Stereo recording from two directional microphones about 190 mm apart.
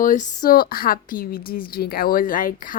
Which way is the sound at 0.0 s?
40° left (ahead or behind).